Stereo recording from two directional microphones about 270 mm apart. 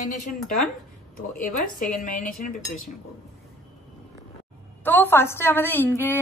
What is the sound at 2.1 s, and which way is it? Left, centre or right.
Speech, left.